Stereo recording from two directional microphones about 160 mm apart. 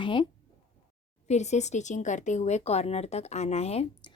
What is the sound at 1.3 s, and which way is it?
Speech, 45° left (ahead or behind).